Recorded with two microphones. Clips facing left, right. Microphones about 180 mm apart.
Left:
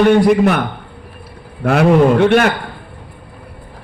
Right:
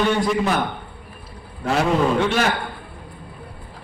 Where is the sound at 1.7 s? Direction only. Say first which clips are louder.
Left 8 dB; 60° left (ahead or behind).